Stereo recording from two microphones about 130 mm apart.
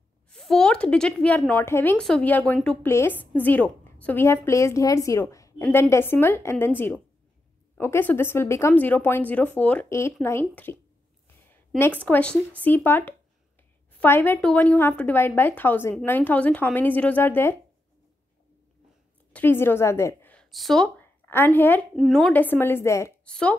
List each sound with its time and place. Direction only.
0.3 s a woman's voice: 5° left (ahead or behind)
2.0 s a woman's voice: 5° left (ahead or behind)
2.9 s a woman's voice: 20° left (ahead or behind)
11.8 s a woman's voice: 15° left (ahead or behind)
19.3 s a woman's voice: 15° left (ahead or behind)
20.5 s speech: centre (ahead or behind)
21.0 s a woman's voice: 15° left (ahead or behind)
21.9 s speech: centre (ahead or behind)
22.3 s a woman's voice: 15° left (ahead or behind)
23.2 s speech: 10° left (ahead or behind)